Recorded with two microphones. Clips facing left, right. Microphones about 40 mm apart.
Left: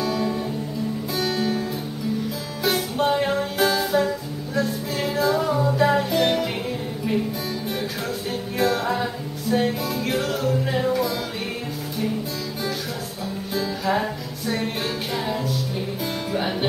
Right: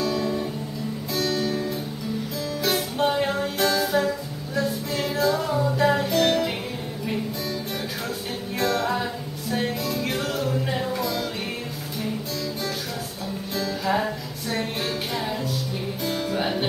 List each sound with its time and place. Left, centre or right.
0.0 s music: centre
8.5 s music: centre
13.6 s music: centre
15.1 s music: centre